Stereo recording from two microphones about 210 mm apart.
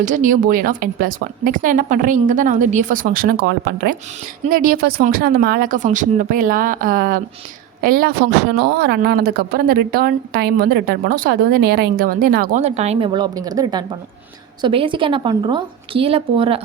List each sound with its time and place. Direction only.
0.0 s a woman's voice: 35° right (ahead or behind)